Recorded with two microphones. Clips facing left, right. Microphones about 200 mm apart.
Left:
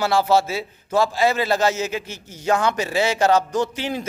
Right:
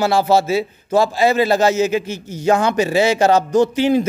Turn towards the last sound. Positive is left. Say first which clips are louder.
# right 9 dB
turn(degrees=-15)  # may be behind; listen again after turning